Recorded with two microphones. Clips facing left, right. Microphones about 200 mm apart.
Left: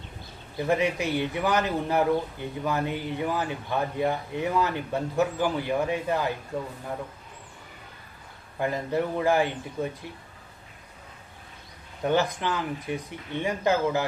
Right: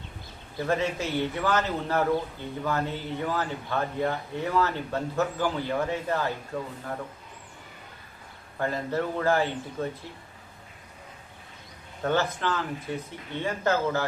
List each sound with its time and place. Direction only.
0.6 s speech: 15° left (ahead or behind)
8.5 s speech: 15° left (ahead or behind)
12.0 s speech: 15° left (ahead or behind)